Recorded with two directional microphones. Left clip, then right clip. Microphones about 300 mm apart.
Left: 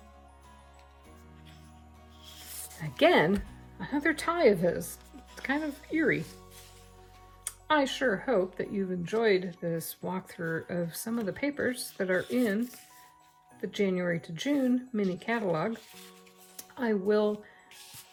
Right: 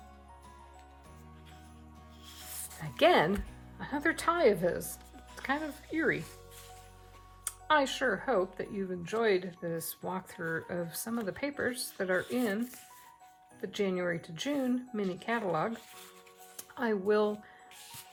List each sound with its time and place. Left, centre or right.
2.7 s speech: centre
7.4 s speech: centre